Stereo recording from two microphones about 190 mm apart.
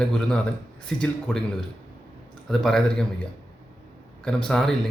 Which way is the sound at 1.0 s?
5° left (ahead or behind).